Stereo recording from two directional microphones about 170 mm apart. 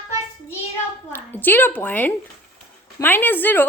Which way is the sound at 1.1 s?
10° left (ahead or behind).